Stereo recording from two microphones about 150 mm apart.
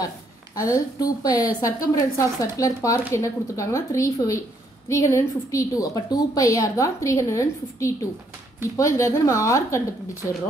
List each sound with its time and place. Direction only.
0.6 s a woman's voice: 25° left (ahead or behind)